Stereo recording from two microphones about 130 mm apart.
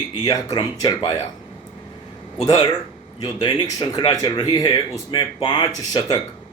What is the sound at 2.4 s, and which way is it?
A man's voice, 30° left (ahead or behind).